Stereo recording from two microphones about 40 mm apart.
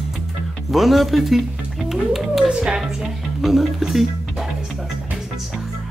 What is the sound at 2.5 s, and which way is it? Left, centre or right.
Speech, centre.